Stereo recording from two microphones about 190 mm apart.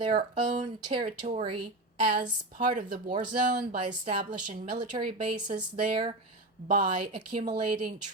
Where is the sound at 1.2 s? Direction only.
30° right (ahead or behind).